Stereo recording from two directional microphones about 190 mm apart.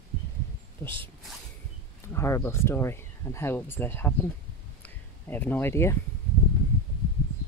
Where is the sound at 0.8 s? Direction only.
15° left (ahead or behind).